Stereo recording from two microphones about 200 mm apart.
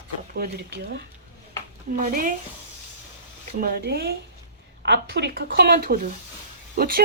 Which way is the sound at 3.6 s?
50° right (ahead or behind).